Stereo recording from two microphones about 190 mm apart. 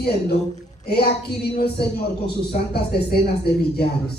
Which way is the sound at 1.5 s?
55° left (ahead or behind).